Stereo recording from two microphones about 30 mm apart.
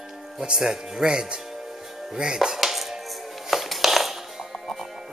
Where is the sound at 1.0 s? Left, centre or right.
Right.